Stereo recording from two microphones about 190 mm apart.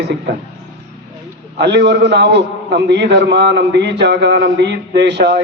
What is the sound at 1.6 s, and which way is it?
A man's voice, 60° right (ahead or behind).